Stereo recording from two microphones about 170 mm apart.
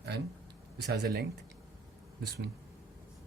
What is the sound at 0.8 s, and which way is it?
Speech, 70° right (ahead or behind).